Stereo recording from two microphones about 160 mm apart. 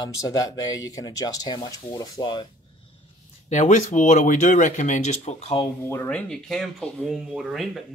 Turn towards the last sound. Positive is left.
turn(degrees=0)  # may be behind; listen again after turning